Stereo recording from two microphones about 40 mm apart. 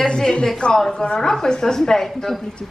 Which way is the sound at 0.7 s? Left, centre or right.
Centre.